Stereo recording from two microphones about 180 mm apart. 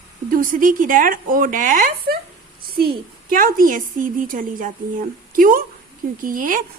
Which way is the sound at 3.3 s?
50° right (ahead or behind).